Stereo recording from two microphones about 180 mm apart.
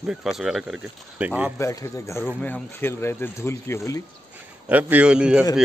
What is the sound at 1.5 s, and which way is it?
Speech, 15° left (ahead or behind).